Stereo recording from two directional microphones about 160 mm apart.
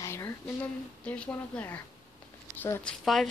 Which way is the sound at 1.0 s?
10° left (ahead or behind).